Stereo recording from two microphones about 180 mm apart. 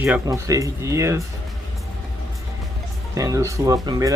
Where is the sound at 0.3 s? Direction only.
20° right (ahead or behind).